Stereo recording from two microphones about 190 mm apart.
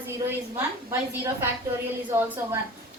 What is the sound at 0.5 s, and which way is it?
A woman's voice, 15° right (ahead or behind).